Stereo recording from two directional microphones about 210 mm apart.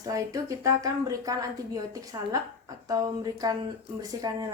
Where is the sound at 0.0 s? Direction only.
15° right (ahead or behind).